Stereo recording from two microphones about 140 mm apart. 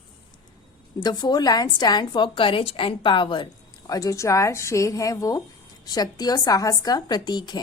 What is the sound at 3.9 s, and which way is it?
Speech, 25° left (ahead or behind).